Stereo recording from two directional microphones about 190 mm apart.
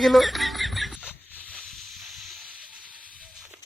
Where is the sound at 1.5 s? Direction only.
Centre (ahead or behind).